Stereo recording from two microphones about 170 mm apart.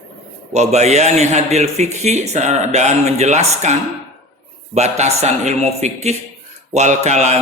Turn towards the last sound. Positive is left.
turn(degrees=-40)  # may be behind; listen again after turning